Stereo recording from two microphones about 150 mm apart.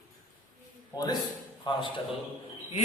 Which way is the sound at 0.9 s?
25° left (ahead or behind).